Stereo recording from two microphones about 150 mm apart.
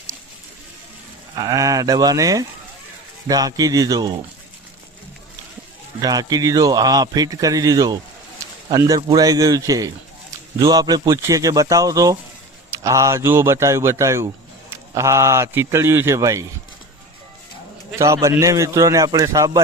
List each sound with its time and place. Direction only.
1.4 s a man's voice: 25° right (ahead or behind)
6.0 s a man's voice: 25° right (ahead or behind)
17.9 s a man's voice: 20° right (ahead or behind)